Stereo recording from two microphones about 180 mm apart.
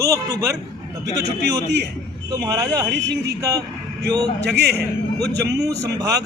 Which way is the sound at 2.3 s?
20° right (ahead or behind).